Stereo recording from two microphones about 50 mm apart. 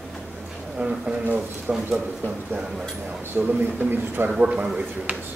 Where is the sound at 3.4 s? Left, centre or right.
Right.